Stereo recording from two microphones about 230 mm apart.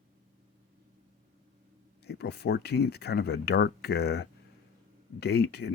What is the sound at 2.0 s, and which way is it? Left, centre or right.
Speech, left.